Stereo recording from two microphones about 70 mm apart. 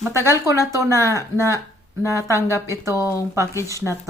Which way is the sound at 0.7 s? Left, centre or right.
Right.